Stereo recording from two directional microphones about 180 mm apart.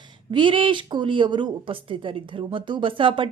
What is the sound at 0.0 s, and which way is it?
Speech, 25° right (ahead or behind).